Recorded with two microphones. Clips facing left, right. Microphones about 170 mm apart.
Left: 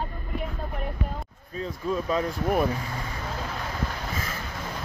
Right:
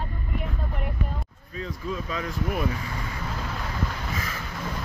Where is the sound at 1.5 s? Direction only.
35° left (ahead or behind).